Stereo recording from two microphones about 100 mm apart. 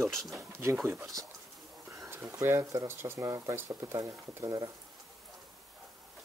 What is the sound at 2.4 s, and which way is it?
Speech, 30° right (ahead or behind).